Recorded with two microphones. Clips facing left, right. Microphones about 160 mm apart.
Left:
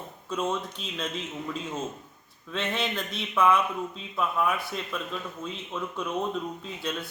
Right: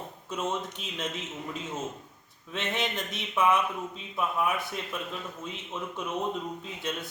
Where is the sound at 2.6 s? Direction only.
20° right (ahead or behind).